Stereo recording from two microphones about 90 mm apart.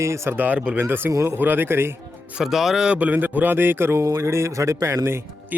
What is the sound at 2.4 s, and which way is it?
Speech, 5° right (ahead or behind).